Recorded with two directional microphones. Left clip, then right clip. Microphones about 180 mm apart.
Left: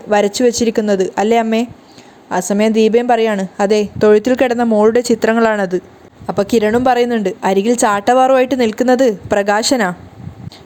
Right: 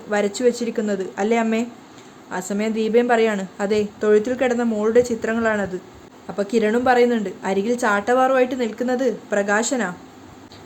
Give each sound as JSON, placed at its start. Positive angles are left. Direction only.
{"t": 0.1, "sound": "a woman's voice", "side_deg": 35}